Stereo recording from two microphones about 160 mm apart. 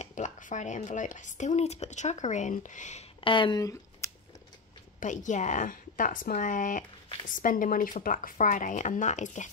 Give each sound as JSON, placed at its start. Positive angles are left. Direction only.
{"t": 0.0, "sound": "speech", "side_deg": 50}
{"t": 3.3, "sound": "speech", "side_deg": 30}
{"t": 5.0, "sound": "speech", "side_deg": 50}